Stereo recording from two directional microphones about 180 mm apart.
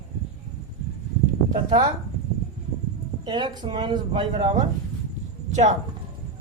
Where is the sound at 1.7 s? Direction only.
25° right (ahead or behind).